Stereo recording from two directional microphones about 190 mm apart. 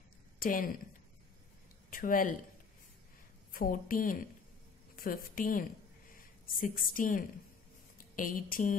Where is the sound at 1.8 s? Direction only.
45° left (ahead or behind).